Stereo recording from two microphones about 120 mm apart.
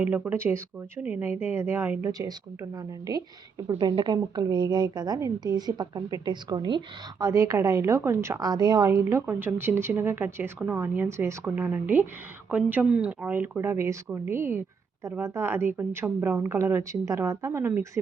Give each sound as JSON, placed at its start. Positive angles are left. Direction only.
{"t": 0.0, "sound": "a woman's voice", "side_deg": -15}
{"t": 2.7, "sound": "a woman's voice", "side_deg": -30}